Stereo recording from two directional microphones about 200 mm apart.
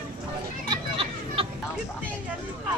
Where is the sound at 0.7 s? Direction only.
25° right (ahead or behind).